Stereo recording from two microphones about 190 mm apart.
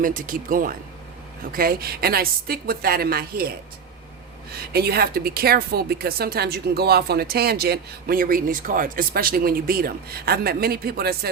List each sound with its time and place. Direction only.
0.0 s a woman's voice: 45° right (ahead or behind)
4.7 s a woman's voice: 55° right (ahead or behind)